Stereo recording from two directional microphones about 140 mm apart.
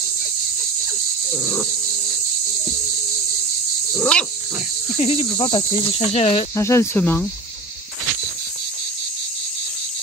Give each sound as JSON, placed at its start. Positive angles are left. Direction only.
{"t": 3.9, "sound": "dog", "side_deg": 5}
{"t": 5.1, "sound": "speech", "side_deg": 30}
{"t": 6.1, "sound": "speech", "side_deg": 45}
{"t": 6.5, "sound": "speech", "side_deg": 20}